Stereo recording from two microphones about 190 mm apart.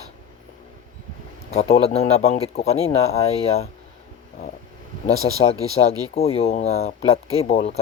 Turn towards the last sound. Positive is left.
turn(degrees=35)  # may be behind; listen again after turning